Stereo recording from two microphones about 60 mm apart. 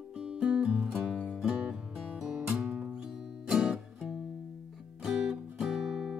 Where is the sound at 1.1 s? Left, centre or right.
Centre.